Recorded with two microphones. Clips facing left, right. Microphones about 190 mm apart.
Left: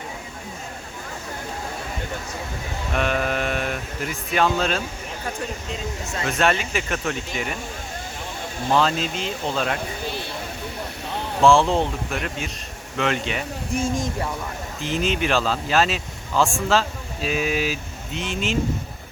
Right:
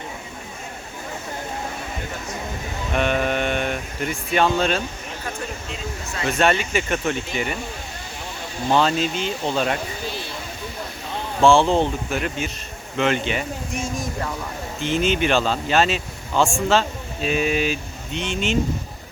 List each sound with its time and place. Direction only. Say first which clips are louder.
2.9 s a sound: right 2 dB; centre (ahead or behind)
6.2 s speech: right 2 dB; centre (ahead or behind)
8.7 s speech: right 2 dB; centre (ahead or behind)
11.4 s speech: right 1 dB; centre (ahead or behind)
13.7 s speech: left 5 dB; 30° left (ahead or behind)
14.8 s speech: right 3 dB; centre (ahead or behind)